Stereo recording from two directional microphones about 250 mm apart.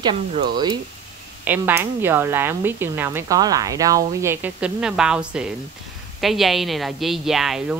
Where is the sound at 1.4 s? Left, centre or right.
Centre.